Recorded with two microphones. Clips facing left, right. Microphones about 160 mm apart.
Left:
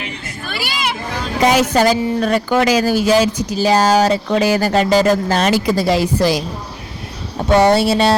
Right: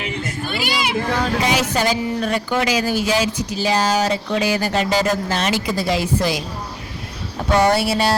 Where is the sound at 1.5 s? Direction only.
45° left (ahead or behind).